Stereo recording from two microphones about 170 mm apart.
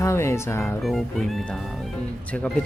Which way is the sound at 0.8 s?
Centre (ahead or behind).